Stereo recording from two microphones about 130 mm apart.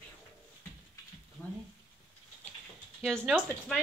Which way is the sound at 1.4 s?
5° left (ahead or behind).